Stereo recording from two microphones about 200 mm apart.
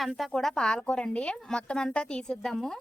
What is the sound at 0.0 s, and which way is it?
A woman's voice, centre (ahead or behind).